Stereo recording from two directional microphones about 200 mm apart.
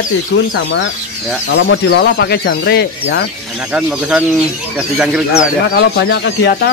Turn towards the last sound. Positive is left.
turn(degrees=60)  # may be behind; listen again after turning